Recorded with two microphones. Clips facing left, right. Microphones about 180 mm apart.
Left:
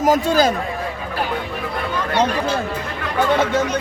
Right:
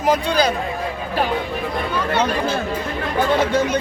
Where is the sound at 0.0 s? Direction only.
45° left (ahead or behind).